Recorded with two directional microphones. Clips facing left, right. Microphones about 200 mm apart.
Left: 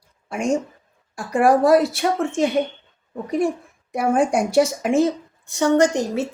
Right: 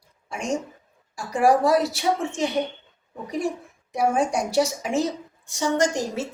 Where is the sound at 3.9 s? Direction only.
55° left (ahead or behind).